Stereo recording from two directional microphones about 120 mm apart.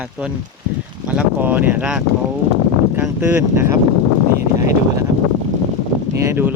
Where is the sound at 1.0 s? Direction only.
10° right (ahead or behind).